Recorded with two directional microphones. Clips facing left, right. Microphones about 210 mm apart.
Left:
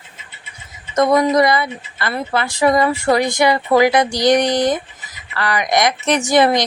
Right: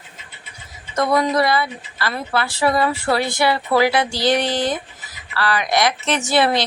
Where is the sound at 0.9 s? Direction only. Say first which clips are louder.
Left 4 dB; 20° left (ahead or behind).